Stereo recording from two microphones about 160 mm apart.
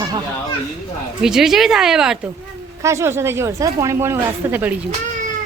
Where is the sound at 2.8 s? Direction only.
15° right (ahead or behind).